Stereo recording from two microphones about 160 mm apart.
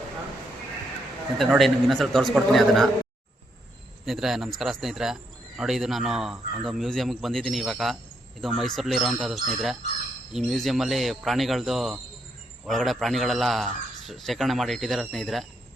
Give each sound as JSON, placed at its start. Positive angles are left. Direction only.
{"t": 1.4, "sound": "a man's voice", "side_deg": 0}
{"t": 4.0, "sound": "a man's voice", "side_deg": 0}